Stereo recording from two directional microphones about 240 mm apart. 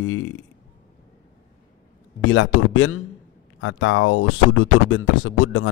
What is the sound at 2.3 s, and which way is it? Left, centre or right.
A man's voice, left.